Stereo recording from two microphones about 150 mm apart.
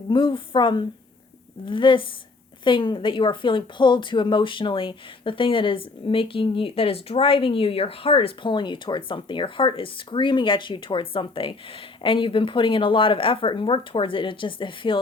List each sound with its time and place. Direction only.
0.1 s speech: 35° left (ahead or behind)